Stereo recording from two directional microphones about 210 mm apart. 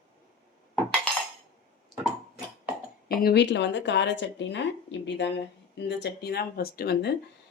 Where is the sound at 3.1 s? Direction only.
45° left (ahead or behind).